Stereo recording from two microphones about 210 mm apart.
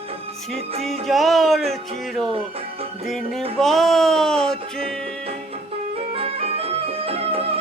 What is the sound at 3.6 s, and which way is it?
Music, centre (ahead or behind).